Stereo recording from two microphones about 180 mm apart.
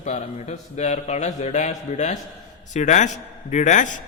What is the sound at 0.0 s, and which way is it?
A man's voice, 40° left (ahead or behind).